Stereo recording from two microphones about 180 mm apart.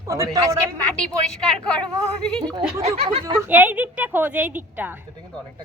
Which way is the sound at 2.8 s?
35° right (ahead or behind).